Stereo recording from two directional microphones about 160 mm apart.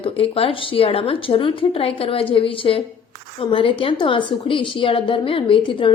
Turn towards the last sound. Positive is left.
turn(degrees=30)  # may be behind; listen again after turning